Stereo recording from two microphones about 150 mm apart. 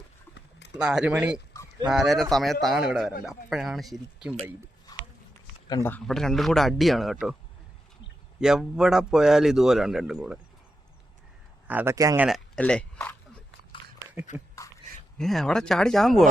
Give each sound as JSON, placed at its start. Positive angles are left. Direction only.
{"t": 0.8, "sound": "a man's voice", "side_deg": -5}
{"t": 4.9, "sound": "a sound", "side_deg": 25}
{"t": 5.6, "sound": "speech", "side_deg": 25}
{"t": 6.1, "sound": "a man's voice", "side_deg": 0}
{"t": 8.4, "sound": "a man's voice", "side_deg": -5}
{"t": 11.7, "sound": "speech", "side_deg": -10}
{"t": 12.5, "sound": "speech", "side_deg": 10}
{"t": 14.0, "sound": "a sound", "side_deg": -20}
{"t": 15.2, "sound": "a man's voice", "side_deg": 0}